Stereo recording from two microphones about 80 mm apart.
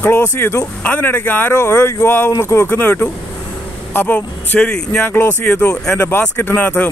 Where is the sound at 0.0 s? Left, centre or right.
Left.